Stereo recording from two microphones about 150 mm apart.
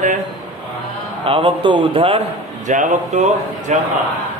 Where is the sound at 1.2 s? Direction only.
35° right (ahead or behind).